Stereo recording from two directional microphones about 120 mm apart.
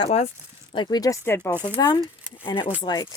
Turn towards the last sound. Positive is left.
turn(degrees=35)  # may be behind; listen again after turning